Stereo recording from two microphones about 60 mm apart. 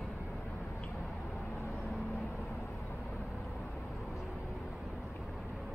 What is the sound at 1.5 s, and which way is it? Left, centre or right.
Vehicle, left.